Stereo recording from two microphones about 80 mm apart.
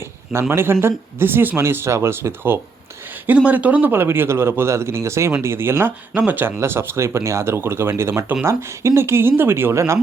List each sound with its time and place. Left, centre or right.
0.5 s speech: right
3.2 s speech: centre; by 10.0 s right